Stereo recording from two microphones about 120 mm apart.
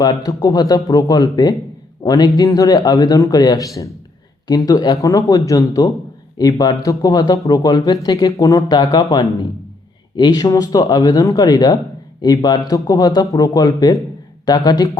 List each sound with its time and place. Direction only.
0.0 s a man's voice: 35° left (ahead or behind)